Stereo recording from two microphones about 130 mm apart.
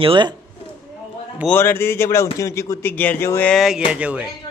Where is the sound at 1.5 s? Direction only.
15° left (ahead or behind).